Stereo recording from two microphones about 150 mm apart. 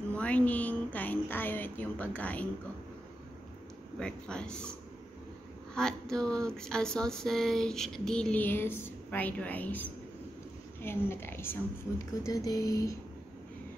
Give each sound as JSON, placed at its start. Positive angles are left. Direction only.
{"t": 0.1, "sound": "a sound", "side_deg": 10}
{"t": 4.0, "sound": "speech", "side_deg": 5}
{"t": 5.8, "sound": "a woman's voice", "side_deg": 5}